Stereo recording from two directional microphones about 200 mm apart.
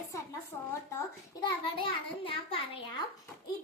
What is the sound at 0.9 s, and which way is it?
A child's voice, 20° left (ahead or behind).